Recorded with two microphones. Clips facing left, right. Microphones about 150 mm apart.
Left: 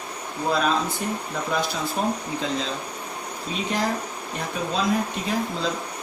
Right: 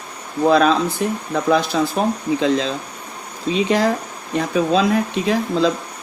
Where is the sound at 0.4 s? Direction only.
80° right.